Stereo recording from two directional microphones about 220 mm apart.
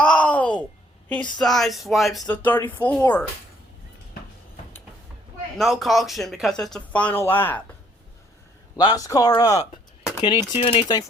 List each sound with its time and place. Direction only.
0.0 s a sound: 5° left (ahead or behind)
1.0 s speech: 5° left (ahead or behind)
5.5 s speech: centre (ahead or behind)
8.8 s speech: 15° left (ahead or behind)